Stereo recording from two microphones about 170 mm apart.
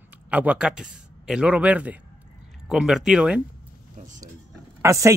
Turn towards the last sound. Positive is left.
turn(degrees=-15)  # may be behind; listen again after turning